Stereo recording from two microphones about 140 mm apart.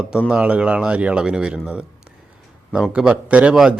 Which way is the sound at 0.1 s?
5° right (ahead or behind).